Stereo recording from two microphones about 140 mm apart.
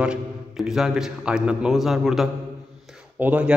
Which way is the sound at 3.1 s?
10° right (ahead or behind).